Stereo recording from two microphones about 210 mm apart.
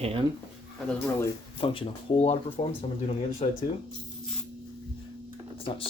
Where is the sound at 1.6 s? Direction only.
30° left (ahead or behind).